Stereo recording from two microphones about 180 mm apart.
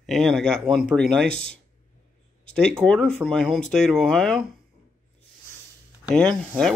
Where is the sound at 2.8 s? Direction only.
5° left (ahead or behind).